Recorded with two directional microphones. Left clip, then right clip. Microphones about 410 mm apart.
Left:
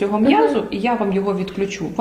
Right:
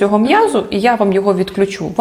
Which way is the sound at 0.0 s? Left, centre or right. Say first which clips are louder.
Right 4 dB; right.